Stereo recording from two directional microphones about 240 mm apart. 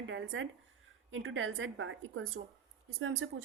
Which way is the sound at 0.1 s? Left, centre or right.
Right.